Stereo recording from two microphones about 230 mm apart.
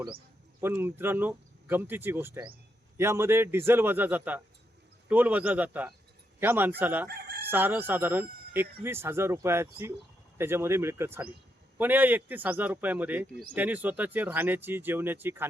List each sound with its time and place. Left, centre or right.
0.6 s speech: centre
7.1 s chicken: right
7.4 s speech: centre